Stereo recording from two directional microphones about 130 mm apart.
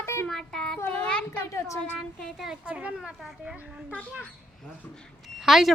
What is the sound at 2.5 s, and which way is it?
Speech, 10° right (ahead or behind).